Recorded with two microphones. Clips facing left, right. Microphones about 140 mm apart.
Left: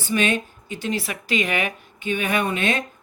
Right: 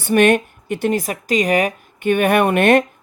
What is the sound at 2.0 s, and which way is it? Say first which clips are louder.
Speech: right 9 dB; 55° right (ahead or behind).